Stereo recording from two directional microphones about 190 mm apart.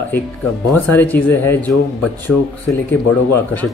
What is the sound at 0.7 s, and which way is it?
Speech, 10° left (ahead or behind).